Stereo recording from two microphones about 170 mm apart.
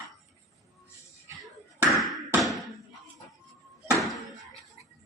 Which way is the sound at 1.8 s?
Centre (ahead or behind).